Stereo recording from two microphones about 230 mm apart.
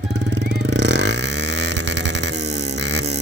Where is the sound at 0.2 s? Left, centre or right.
Right.